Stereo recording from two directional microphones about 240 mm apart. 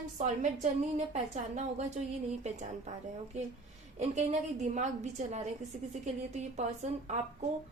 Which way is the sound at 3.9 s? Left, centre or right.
Right.